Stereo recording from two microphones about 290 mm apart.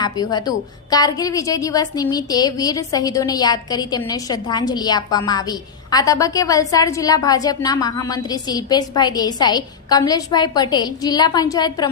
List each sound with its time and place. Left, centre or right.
0.0 s a woman's voice: centre